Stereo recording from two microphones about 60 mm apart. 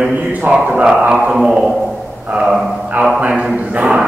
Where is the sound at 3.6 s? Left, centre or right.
Centre.